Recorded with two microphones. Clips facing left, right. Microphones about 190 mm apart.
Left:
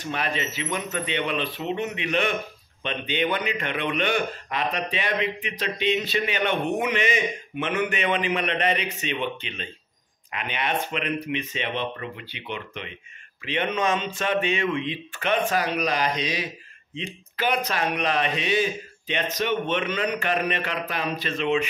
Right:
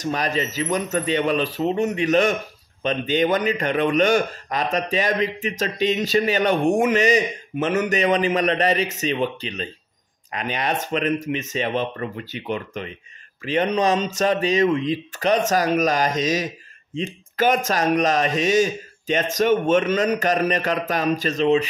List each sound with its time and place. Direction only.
0.0 s a man's voice: 40° right (ahead or behind)